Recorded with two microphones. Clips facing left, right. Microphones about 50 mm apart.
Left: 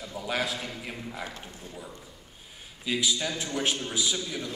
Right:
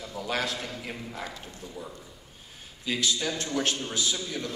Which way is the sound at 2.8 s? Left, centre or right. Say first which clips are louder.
Left 1 dB; centre.